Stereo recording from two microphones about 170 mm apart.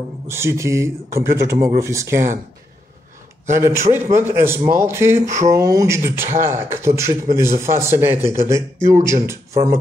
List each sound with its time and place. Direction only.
0.3 s speech: 15° right (ahead or behind)
3.5 s speech: 15° right (ahead or behind)